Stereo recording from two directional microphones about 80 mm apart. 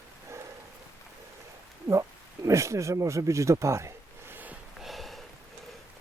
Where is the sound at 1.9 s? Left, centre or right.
Right.